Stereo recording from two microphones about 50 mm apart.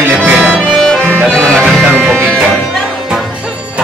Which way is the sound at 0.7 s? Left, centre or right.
Centre.